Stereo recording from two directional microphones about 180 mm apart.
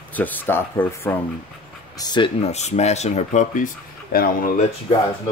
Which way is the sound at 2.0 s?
25° left (ahead or behind).